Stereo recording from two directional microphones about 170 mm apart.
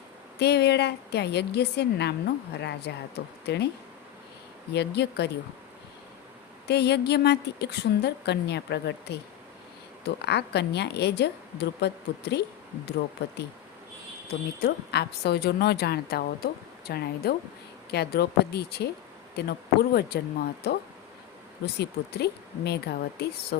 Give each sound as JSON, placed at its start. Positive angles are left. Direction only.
{"t": 0.3, "sound": "a woman's voice", "side_deg": 75}
{"t": 4.7, "sound": "a woman's voice", "side_deg": 75}
{"t": 6.7, "sound": "a woman's voice", "side_deg": 80}
{"t": 14.6, "sound": "a woman's voice", "side_deg": 70}
{"t": 21.8, "sound": "a woman's voice", "side_deg": 75}